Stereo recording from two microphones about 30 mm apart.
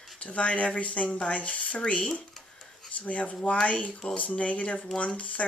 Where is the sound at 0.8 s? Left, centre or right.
Left.